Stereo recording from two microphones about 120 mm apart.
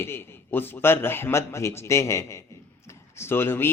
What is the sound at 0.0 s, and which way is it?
A man's voice, 20° left (ahead or behind).